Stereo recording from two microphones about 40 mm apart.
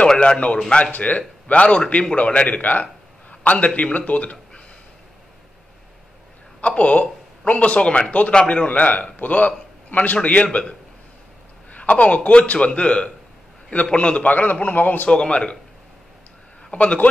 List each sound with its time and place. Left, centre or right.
0.2 s a man's voice: left
6.6 s a man's voice: left
11.7 s a man's voice: left
14.3 s a man's voice: left
15.0 s speech: left
16.7 s speech: left